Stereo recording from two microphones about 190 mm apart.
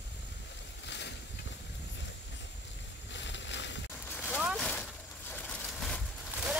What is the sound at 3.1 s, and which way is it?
Boat, 70° left (ahead or behind).